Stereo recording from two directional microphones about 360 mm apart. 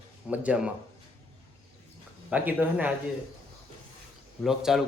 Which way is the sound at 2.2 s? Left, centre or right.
Centre.